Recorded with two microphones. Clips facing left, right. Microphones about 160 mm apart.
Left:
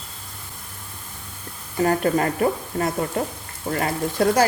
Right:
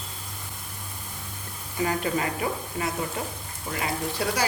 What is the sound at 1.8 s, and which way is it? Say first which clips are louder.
Speech: left 7 dB; 50° left (ahead or behind).